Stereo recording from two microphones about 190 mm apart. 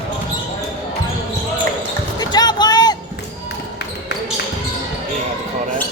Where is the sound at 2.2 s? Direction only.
20° left (ahead or behind).